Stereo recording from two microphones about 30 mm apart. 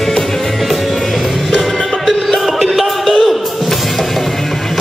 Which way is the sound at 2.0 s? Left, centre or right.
Centre.